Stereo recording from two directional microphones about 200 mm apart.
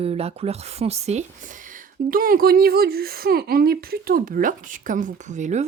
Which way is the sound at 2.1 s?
45° right (ahead or behind).